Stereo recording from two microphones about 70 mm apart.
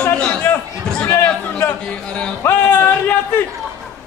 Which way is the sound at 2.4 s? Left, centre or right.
Left.